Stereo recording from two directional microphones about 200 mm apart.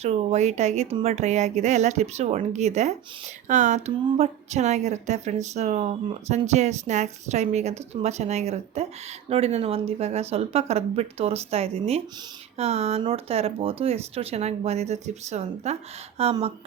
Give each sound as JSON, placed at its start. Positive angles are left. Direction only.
{"t": 0.0, "sound": "speech", "side_deg": -35}